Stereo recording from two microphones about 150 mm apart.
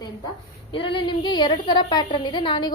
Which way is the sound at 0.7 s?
35° left (ahead or behind).